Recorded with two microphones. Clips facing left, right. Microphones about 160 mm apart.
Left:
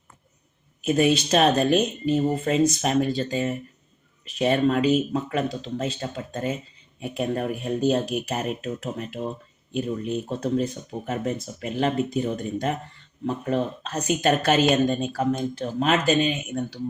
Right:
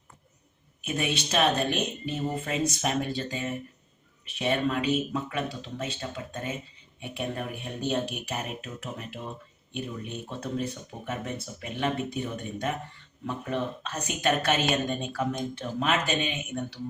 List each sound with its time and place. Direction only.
0.8 s speech: 35° left (ahead or behind)